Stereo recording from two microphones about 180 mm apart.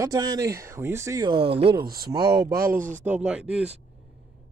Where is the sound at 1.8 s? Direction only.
55° right (ahead or behind).